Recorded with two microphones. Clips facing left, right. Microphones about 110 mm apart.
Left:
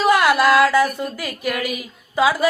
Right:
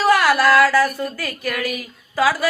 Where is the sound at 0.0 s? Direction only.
20° left (ahead or behind).